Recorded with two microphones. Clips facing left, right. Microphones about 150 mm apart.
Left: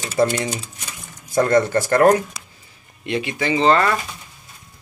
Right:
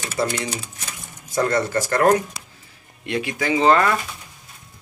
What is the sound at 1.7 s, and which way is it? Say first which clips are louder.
Speech: left 3 dB; 45° left (ahead or behind).